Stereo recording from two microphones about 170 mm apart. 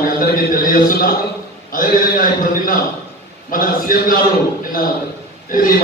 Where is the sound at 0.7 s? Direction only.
55° left (ahead or behind).